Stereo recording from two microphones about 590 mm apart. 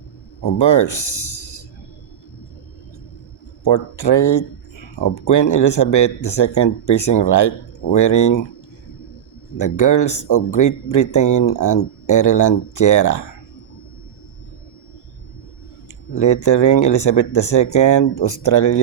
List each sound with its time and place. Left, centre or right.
0.6 s speech: left
3.6 s speech: left
9.6 s speech: left
16.1 s speech: left